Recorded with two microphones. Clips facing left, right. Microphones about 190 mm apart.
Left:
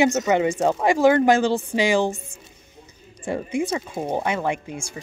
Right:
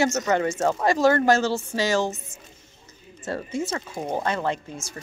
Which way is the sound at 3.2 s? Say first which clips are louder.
Left 4 dB; 15° left (ahead or behind).